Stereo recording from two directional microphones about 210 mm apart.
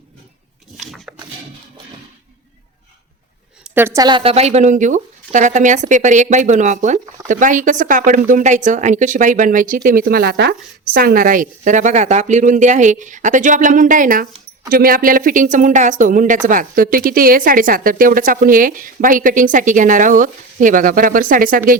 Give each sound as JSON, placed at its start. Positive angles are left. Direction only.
{"t": 0.8, "sound": "pig", "side_deg": 0}
{"t": 3.6, "sound": "speech", "side_deg": -10}